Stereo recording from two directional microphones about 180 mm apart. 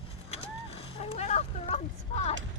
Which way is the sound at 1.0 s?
35° left (ahead or behind).